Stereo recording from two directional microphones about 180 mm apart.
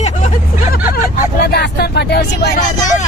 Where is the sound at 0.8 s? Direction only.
15° right (ahead or behind).